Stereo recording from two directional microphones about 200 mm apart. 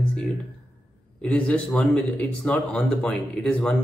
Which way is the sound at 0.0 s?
5° left (ahead or behind).